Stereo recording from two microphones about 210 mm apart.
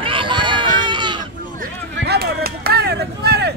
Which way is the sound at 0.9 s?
20° right (ahead or behind).